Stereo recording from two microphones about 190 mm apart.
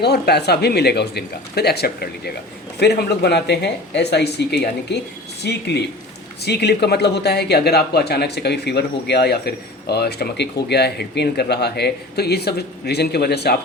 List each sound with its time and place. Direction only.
0.0 s speech: 60° left (ahead or behind)